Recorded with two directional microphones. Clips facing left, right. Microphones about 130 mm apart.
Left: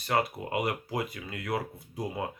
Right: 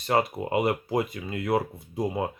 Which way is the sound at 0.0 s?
25° right (ahead or behind).